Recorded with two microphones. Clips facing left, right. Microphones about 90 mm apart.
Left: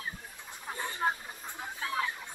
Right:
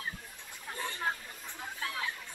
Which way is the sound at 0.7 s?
20° left (ahead or behind).